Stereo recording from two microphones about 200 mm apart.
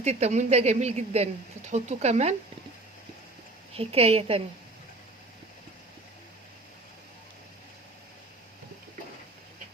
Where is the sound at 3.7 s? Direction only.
30° right (ahead or behind).